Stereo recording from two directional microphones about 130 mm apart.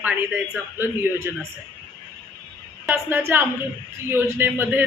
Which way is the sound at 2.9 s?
15° right (ahead or behind).